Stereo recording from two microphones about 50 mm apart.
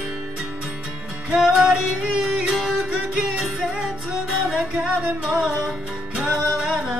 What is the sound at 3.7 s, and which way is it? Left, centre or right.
Music, right.